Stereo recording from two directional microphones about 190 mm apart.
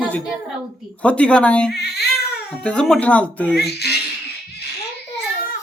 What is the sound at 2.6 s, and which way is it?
Speech, 5° left (ahead or behind).